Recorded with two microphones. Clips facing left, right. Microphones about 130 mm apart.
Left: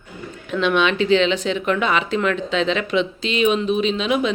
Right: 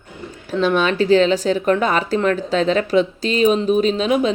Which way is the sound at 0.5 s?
35° right (ahead or behind).